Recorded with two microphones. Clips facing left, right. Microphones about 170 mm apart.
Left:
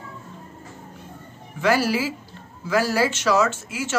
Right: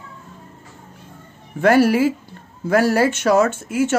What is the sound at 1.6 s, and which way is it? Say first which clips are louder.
Speech: right 7 dB; 55° right (ahead or behind).